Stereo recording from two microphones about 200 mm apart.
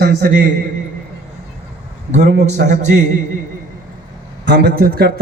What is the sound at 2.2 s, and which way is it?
Speech, 55° right (ahead or behind).